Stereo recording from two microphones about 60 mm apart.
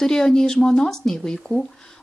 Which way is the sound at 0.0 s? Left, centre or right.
Centre.